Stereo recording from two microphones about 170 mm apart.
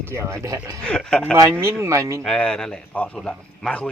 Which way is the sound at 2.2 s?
5° left (ahead or behind).